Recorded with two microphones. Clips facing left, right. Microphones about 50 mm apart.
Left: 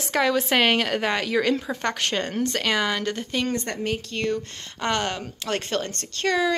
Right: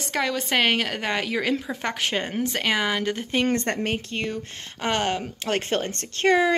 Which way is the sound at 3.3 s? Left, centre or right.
Right.